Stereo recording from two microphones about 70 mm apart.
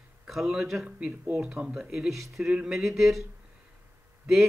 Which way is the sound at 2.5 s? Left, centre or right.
Centre.